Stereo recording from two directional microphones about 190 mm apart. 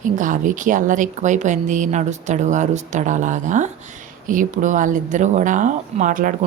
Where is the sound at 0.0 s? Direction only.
45° right (ahead or behind).